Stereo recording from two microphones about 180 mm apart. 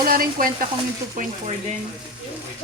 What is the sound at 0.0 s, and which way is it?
Frying, 55° right (ahead or behind).